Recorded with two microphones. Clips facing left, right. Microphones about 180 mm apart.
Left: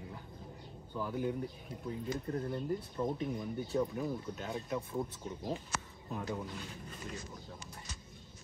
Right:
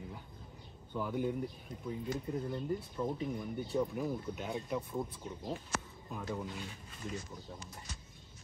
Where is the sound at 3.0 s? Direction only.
10° left (ahead or behind).